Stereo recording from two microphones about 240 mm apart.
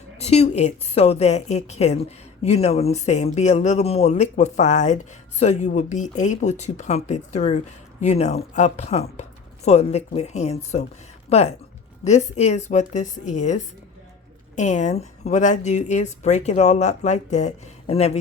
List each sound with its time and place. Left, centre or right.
0.2 s a woman's voice: left